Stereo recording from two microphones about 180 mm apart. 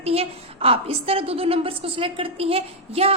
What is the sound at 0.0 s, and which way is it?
A woman's voice, 35° right (ahead or behind).